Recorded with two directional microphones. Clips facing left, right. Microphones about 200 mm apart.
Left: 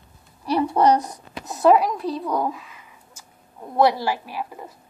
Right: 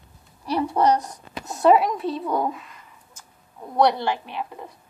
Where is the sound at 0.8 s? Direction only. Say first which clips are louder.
Left 2 dB; 20° left (ahead or behind).